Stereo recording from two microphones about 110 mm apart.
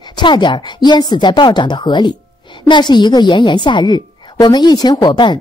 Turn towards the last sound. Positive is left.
turn(degrees=45)  # may be behind; listen again after turning